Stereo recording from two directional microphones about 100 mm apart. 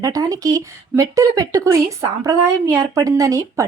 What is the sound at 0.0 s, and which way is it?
Speech, 35° right (ahead or behind).